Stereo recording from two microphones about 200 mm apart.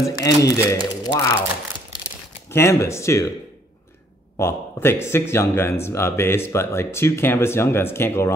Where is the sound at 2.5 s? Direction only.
15° left (ahead or behind).